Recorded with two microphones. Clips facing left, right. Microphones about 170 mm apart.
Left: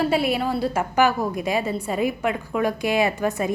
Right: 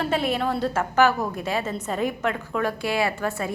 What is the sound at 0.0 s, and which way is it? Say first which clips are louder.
A woman's voice: left 3 dB; 10° left (ahead or behind).